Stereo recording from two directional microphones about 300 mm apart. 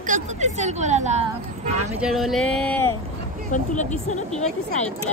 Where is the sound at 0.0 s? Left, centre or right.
Right.